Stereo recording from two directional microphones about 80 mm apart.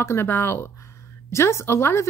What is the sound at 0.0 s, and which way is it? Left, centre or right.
Speech, left.